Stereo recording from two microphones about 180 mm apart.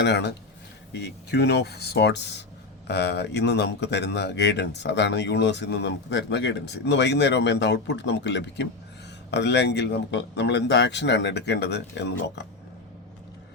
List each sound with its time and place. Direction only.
0.0 s speech: 70° left (ahead or behind)